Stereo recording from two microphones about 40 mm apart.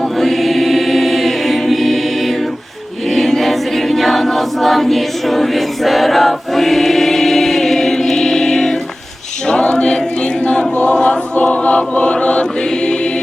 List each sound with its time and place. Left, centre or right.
0.2 s choir: centre
3.1 s a capella: centre
9.5 s choir: left
10.4 s chant: left
11.3 s choir: left